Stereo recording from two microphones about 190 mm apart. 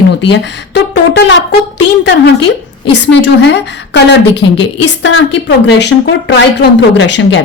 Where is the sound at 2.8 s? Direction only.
70° left (ahead or behind).